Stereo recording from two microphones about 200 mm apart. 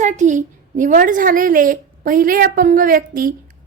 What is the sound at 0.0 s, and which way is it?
A child's voice, 40° right (ahead or behind).